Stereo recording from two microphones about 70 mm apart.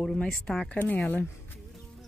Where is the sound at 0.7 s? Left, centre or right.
Left.